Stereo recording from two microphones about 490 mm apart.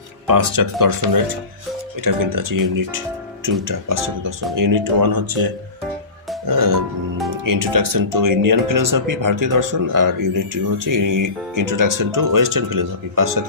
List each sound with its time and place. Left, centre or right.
0.3 s speech: right
6.5 s speech: right